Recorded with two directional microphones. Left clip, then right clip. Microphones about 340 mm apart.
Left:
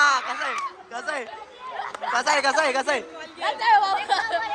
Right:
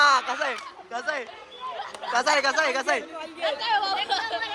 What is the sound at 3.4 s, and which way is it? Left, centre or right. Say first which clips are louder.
Speech: left 6 dB; left.